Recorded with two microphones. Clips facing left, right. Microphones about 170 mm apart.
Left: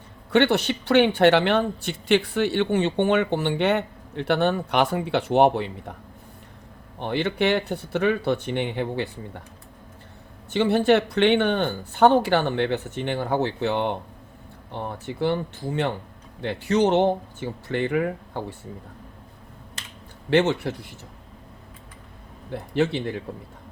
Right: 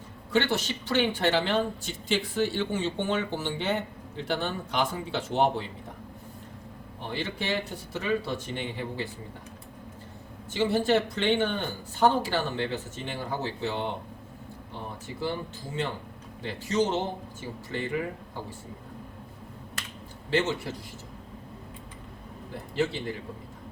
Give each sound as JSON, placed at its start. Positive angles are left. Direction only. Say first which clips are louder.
{"t": 0.3, "sound": "speech", "louder": "left 7 dB", "side_deg": 65}
{"t": 7.0, "sound": "speech", "louder": "left 10 dB", "side_deg": 65}
{"t": 10.5, "sound": "speech", "louder": "left 5 dB", "side_deg": 65}
{"t": 20.3, "sound": "speech", "louder": "left 7 dB", "side_deg": 65}
{"t": 22.7, "sound": "speech", "louder": "left 5 dB", "side_deg": 65}